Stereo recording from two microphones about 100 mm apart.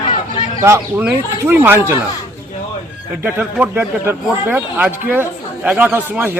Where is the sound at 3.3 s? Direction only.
15° right (ahead or behind).